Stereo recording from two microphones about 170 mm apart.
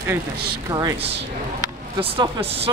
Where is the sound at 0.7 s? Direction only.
20° right (ahead or behind).